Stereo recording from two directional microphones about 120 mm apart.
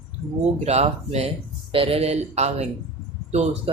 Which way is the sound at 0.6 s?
65° right (ahead or behind).